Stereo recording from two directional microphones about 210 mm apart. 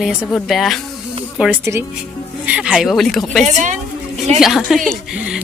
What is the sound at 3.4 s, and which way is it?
Speech, 35° right (ahead or behind).